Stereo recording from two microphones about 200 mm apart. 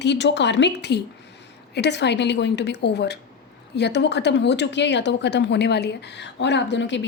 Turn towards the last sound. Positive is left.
turn(degrees=65)  # may be behind; listen again after turning